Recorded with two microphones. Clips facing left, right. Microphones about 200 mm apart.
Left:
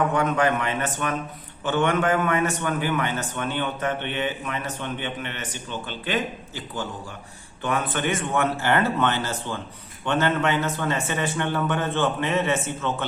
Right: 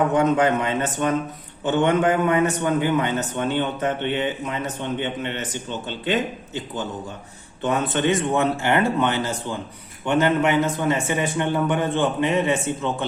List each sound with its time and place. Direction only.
0.1 s a man's voice: 20° right (ahead or behind)